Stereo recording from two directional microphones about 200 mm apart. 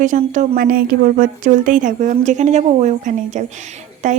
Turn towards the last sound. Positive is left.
turn(degrees=-40)  # may be behind; listen again after turning